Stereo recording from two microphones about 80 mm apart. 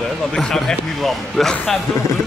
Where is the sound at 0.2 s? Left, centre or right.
Centre.